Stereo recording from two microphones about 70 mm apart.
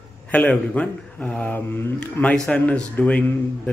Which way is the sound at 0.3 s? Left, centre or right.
Centre.